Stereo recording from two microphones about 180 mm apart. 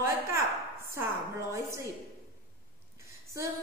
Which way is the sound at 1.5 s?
15° right (ahead or behind).